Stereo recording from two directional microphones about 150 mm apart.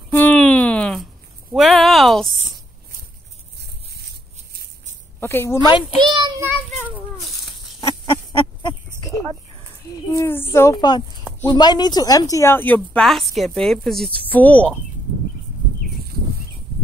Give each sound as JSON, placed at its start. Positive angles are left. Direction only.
{"t": 0.1, "sound": "a sound", "side_deg": 10}
{"t": 5.2, "sound": "speech", "side_deg": 15}
{"t": 5.7, "sound": "a child's voice", "side_deg": 30}
{"t": 6.0, "sound": "child singing", "side_deg": -30}
{"t": 7.8, "sound": "a sound", "side_deg": 25}
{"t": 10.0, "sound": "speech", "side_deg": 15}
{"t": 10.8, "sound": "speech", "side_deg": 30}